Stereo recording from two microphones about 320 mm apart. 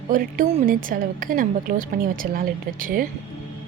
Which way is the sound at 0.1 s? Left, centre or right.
Right.